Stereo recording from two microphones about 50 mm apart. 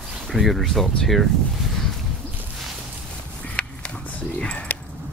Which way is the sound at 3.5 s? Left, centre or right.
Left.